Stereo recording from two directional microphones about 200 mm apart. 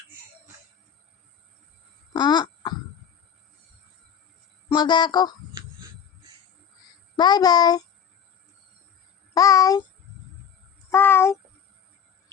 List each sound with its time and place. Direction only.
2.1 s cough: 20° left (ahead or behind)
4.7 s speech: 20° left (ahead or behind)
7.2 s speech: 20° left (ahead or behind)
9.3 s a child's voice: 15° left (ahead or behind)
10.9 s a child's voice: 10° left (ahead or behind)